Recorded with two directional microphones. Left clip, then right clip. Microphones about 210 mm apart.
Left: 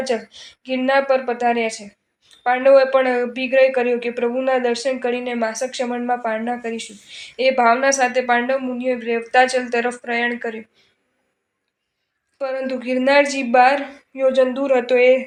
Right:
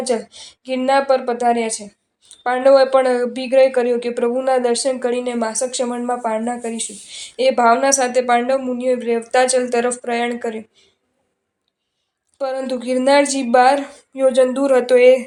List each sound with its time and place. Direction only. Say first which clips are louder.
0.0 s speech: right 2 dB; 35° right (ahead or behind)
12.4 s speech: right 1 dB; 35° right (ahead or behind)